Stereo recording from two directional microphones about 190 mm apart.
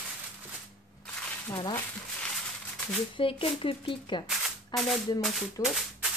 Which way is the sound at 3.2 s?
30° left (ahead or behind).